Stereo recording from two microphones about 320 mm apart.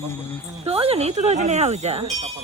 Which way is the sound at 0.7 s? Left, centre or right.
Centre.